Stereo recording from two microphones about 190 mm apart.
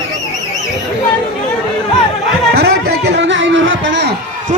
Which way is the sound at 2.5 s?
55° right (ahead or behind).